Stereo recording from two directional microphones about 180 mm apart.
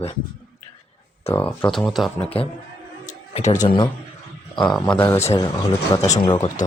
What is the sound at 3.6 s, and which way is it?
Speech, 25° left (ahead or behind).